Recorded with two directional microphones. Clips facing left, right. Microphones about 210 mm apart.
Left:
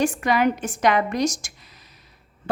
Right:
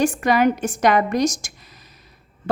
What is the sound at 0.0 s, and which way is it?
A woman's voice, 45° right (ahead or behind).